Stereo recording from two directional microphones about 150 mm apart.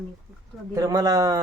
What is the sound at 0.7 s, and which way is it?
Speech, 25° right (ahead or behind).